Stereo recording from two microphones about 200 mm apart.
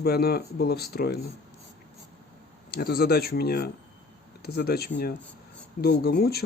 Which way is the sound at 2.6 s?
50° left (ahead or behind).